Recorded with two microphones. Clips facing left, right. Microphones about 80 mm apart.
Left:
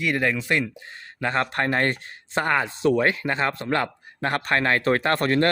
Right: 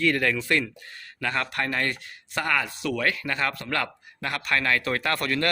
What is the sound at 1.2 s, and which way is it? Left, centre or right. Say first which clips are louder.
A man's voice: left 4 dB; left.